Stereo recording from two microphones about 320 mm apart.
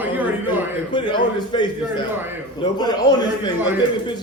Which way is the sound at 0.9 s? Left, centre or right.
Centre.